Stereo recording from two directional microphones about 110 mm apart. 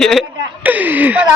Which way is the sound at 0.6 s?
15° right (ahead or behind).